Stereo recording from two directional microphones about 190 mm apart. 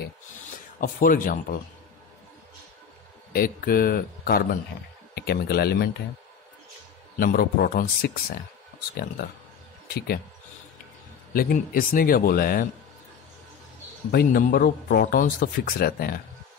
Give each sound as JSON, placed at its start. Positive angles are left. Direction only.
{"t": 0.7, "sound": "speech", "side_deg": 45}
{"t": 3.3, "sound": "speech", "side_deg": 50}
{"t": 7.2, "sound": "speech", "side_deg": 50}
{"t": 9.9, "sound": "speech", "side_deg": 55}
{"t": 11.3, "sound": "speech", "side_deg": 50}
{"t": 14.1, "sound": "speech", "side_deg": 50}